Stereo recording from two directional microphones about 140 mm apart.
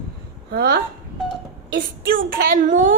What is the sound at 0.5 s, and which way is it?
Speech, 90° right.